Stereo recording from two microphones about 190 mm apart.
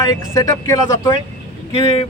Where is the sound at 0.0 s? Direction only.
20° left (ahead or behind).